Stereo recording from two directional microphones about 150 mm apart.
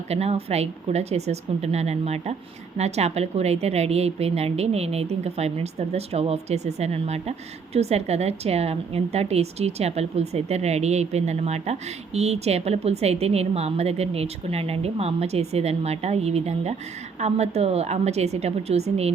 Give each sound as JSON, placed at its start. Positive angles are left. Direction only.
{"t": 0.1, "sound": "a woman's voice", "side_deg": -45}